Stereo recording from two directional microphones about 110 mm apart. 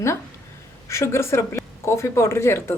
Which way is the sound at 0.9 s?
25° left (ahead or behind).